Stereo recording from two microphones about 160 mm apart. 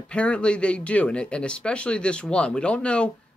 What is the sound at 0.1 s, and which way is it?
Speech, 5° left (ahead or behind).